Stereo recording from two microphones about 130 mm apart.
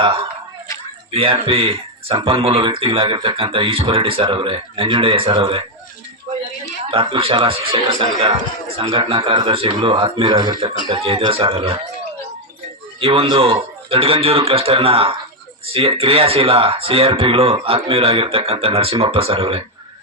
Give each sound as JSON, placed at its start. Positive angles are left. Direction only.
{"t": 1.1, "sound": "speech", "side_deg": -45}
{"t": 6.9, "sound": "a man's voice", "side_deg": -40}
{"t": 10.8, "sound": "speech", "side_deg": -45}
{"t": 13.0, "sound": "speech", "side_deg": -45}